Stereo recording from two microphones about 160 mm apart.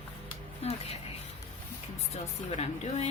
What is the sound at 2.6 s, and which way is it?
Speech, 45° left (ahead or behind).